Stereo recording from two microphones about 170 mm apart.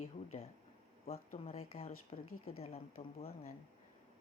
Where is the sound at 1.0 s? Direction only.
40° left (ahead or behind).